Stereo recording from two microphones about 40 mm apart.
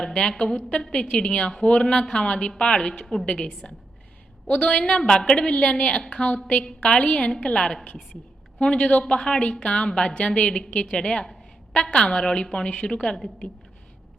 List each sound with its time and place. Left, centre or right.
0.0 s a woman's voice: centre